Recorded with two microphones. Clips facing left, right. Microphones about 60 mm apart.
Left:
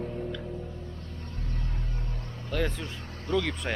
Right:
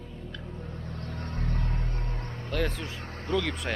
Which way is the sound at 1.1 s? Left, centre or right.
Right.